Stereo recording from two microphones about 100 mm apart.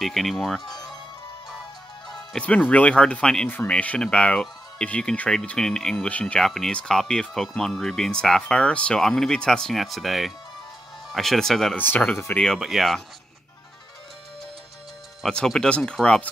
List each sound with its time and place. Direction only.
0.0 s speech: centre (ahead or behind)
0.7 s music: 5° left (ahead or behind)
2.1 s speech: 10° left (ahead or behind)
3.4 s speech: 20° left (ahead or behind); by 11.7 s 5° left (ahead or behind)
11.7 s speech: 20° left (ahead or behind)
12.5 s speech: centre (ahead or behind)
15.2 s speech: 5° left (ahead or behind)